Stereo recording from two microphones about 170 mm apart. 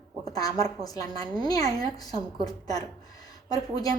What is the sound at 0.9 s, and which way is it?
A woman's voice, 20° left (ahead or behind).